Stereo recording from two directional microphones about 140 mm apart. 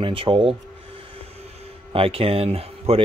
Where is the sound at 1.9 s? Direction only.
40° right (ahead or behind).